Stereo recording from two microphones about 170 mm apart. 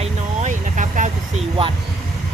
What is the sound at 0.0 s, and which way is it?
Vehicle, 45° right (ahead or behind).